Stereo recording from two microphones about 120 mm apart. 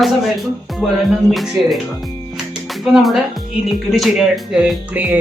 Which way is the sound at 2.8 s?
5° right (ahead or behind).